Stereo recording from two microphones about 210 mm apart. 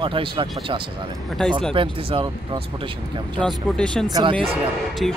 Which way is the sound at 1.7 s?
25° right (ahead or behind).